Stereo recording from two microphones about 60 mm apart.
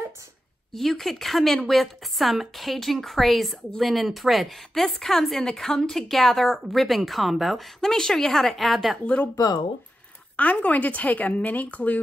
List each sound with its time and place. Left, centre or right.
0.7 s speech: centre
9.0 s a woman's voice: centre
10.3 s a woman's voice: left